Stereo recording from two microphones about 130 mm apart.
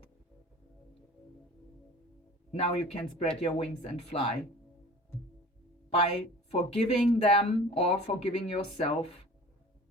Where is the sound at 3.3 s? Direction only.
50° left (ahead or behind).